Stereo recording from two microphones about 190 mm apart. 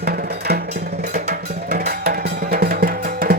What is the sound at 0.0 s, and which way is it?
Music, 55° right (ahead or behind).